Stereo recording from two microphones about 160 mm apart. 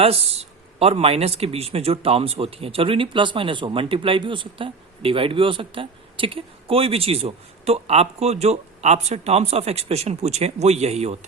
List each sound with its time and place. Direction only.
0.0 s speech: 40° right (ahead or behind)